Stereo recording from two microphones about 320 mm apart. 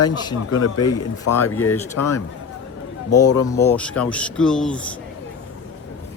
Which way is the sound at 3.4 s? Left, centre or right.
Centre.